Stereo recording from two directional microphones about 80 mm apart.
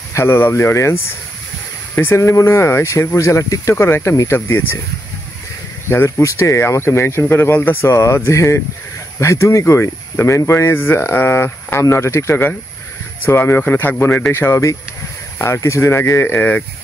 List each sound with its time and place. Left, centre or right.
0.1 s speech: left
2.0 s speech: left
3.7 s speech: left
5.9 s speech: left
7.8 s speech: left